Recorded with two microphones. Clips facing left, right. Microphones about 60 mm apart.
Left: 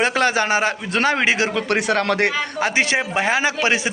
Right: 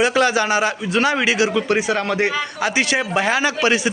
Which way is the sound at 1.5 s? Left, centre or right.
Left.